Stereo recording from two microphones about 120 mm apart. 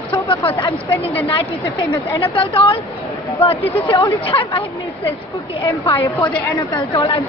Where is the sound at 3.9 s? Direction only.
45° left (ahead or behind).